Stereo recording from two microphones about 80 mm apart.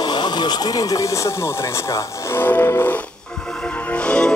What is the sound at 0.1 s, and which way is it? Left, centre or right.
Speech, left.